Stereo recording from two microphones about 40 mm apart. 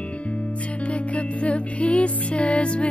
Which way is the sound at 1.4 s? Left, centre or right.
Left.